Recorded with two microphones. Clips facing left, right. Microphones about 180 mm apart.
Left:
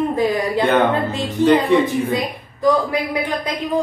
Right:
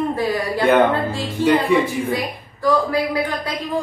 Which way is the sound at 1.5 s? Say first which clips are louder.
Left 2 dB; 10° right (ahead or behind).